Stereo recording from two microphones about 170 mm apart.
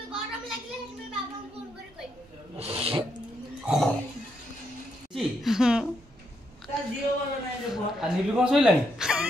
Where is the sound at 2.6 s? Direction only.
35° right (ahead or behind).